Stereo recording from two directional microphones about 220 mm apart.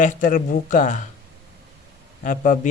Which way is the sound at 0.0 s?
40° left (ahead or behind).